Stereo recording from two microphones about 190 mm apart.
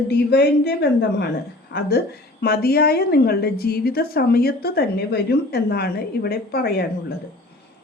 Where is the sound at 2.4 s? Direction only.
55° left (ahead or behind).